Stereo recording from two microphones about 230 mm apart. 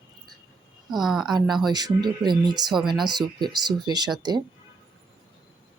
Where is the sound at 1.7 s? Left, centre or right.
Centre.